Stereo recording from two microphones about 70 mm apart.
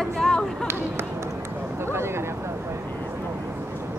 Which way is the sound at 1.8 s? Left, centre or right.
Right.